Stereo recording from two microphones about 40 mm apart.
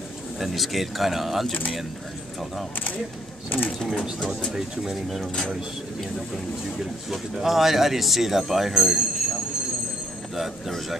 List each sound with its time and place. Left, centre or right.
0.4 s speech: centre
3.4 s speech: left
4.6 s speech: centre
7.1 s speech: centre